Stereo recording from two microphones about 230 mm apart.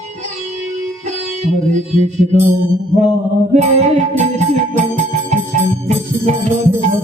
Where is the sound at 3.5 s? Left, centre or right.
Right.